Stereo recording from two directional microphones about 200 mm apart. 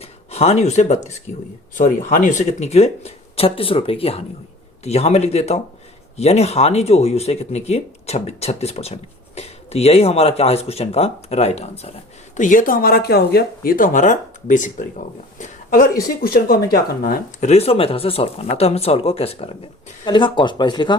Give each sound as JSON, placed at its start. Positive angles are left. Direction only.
{"t": 0.0, "sound": "speech", "side_deg": 30}
{"t": 12.4, "sound": "speech", "side_deg": 40}
{"t": 17.4, "sound": "speech", "side_deg": 30}